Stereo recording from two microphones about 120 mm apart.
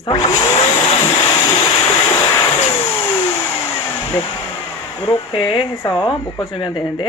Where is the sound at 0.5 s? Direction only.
60° left (ahead or behind).